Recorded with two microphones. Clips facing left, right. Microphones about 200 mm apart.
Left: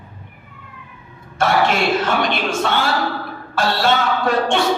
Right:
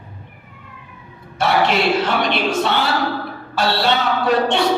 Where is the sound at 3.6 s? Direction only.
50° left (ahead or behind).